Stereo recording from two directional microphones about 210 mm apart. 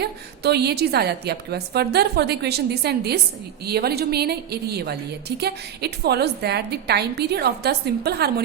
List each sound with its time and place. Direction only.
0.0 s a woman's voice: 50° right (ahead or behind)